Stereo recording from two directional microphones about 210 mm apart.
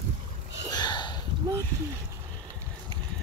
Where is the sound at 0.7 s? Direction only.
20° left (ahead or behind).